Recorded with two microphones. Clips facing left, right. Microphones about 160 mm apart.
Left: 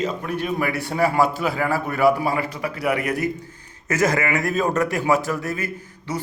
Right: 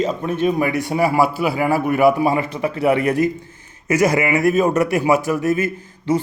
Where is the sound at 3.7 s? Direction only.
15° right (ahead or behind).